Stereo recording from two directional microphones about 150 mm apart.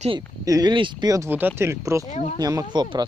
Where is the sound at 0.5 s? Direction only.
25° right (ahead or behind).